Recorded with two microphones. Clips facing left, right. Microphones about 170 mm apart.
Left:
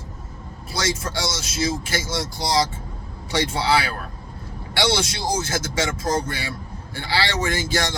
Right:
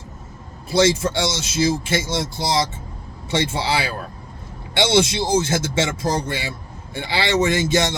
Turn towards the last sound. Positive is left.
turn(degrees=-25)  # may be behind; listen again after turning